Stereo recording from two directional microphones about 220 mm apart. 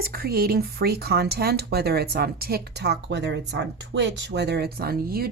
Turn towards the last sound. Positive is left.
turn(degrees=-45)  # may be behind; listen again after turning